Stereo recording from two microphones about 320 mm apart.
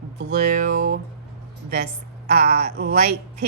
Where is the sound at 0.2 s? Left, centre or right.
Right.